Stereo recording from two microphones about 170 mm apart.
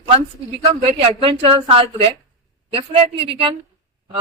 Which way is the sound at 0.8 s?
35° right (ahead or behind).